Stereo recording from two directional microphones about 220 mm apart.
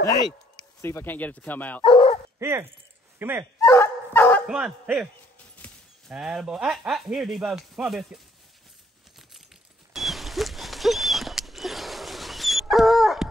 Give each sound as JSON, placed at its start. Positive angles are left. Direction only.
{"t": 0.7, "sound": "speech", "side_deg": 10}
{"t": 1.8, "sound": "dog", "side_deg": 25}
{"t": 2.3, "sound": "speech", "side_deg": -10}
{"t": 3.6, "sound": "dog", "side_deg": 10}
{"t": 4.5, "sound": "speech", "side_deg": -5}
{"t": 9.9, "sound": "a sound", "side_deg": 0}